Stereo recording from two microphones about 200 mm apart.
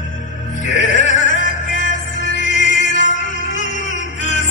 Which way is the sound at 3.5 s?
35° left (ahead or behind).